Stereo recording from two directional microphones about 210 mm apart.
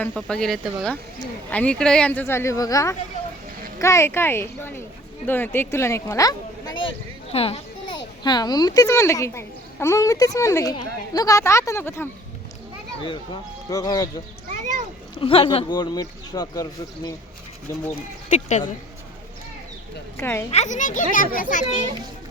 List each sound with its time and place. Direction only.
0.0 s a woman's voice: centre (ahead or behind)
13.7 s speech: 15° left (ahead or behind)
15.2 s speech: 25° left (ahead or behind)
18.3 s a child's voice: 35° left (ahead or behind)
20.1 s speech: 10° left (ahead or behind)
20.5 s a child's voice: 35° left (ahead or behind)